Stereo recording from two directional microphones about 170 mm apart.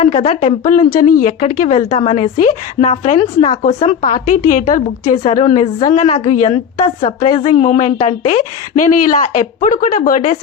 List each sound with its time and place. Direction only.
0.0 s a woman's voice: 35° left (ahead or behind)
5.0 s a woman's voice: 35° left (ahead or behind)
8.8 s speech: 50° left (ahead or behind)